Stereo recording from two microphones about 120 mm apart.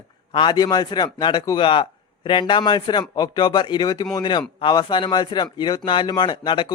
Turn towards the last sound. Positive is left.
turn(degrees=40)  # may be behind; listen again after turning